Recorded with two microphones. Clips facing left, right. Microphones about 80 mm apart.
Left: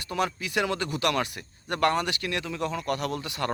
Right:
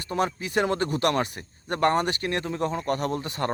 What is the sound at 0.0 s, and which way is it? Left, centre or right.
Speech, right.